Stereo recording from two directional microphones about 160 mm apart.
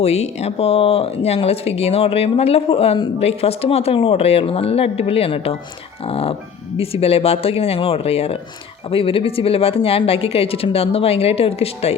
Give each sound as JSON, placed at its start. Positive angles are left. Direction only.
{"t": 0.0, "sound": "speech", "side_deg": 40}